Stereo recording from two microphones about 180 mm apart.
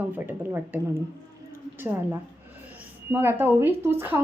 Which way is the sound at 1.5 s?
10° right (ahead or behind).